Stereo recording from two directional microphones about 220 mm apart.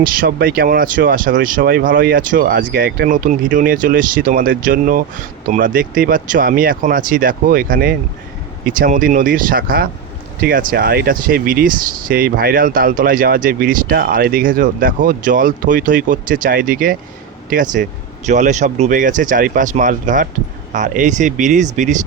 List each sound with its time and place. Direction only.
0.0 s speech: 40° right (ahead or behind)